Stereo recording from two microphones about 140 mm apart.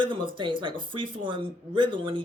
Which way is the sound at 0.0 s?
35° right (ahead or behind).